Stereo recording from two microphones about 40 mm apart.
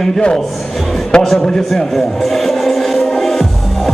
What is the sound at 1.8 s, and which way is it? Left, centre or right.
Music, centre.